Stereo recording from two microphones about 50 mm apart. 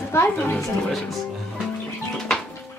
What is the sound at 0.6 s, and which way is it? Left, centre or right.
Speech, centre.